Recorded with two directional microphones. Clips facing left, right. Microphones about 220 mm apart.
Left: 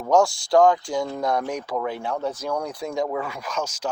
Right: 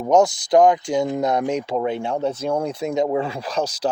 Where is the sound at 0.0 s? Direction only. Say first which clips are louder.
Right 3 dB; 20° right (ahead or behind).